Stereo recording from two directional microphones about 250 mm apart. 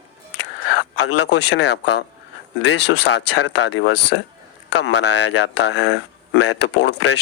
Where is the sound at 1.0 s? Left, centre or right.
Left.